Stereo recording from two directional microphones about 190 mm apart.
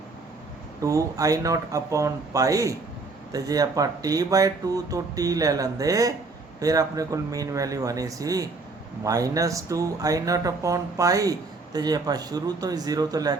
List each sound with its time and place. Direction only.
0.8 s speech: 15° right (ahead or behind)